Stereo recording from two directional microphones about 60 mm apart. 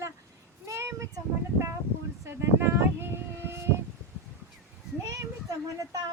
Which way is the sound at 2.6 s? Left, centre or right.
Right.